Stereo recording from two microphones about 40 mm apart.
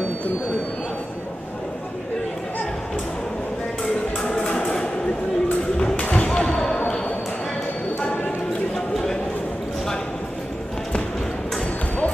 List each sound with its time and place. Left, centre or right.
4.2 s music: left
5.8 s thump: left
8.7 s a sound: centre